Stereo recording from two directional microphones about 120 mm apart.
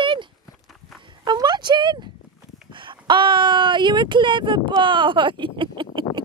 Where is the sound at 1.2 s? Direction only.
35° right (ahead or behind).